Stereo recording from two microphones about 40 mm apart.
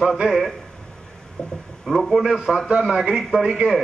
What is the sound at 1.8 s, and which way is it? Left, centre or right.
Speech, centre.